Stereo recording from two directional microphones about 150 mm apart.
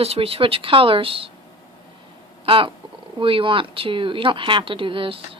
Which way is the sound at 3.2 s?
35° right (ahead or behind).